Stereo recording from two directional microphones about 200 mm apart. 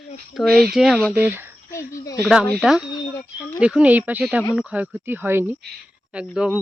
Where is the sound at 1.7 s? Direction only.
15° left (ahead or behind).